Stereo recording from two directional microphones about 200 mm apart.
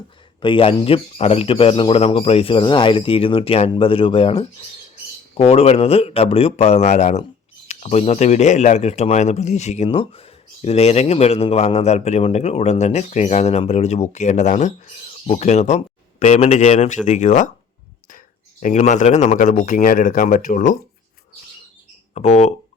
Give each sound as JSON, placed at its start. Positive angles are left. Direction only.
{"t": 0.4, "sound": "speech", "side_deg": 25}
{"t": 18.6, "sound": "speech", "side_deg": 35}
{"t": 22.1, "sound": "speech", "side_deg": 35}